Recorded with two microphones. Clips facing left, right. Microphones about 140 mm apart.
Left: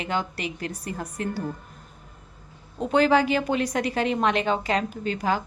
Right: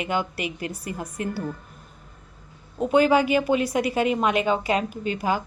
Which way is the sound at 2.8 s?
10° right (ahead or behind).